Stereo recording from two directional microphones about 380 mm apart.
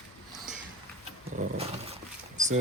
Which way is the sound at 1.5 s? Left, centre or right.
Centre.